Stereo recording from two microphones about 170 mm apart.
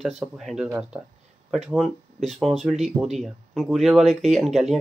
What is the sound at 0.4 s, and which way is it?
Speech, centre (ahead or behind).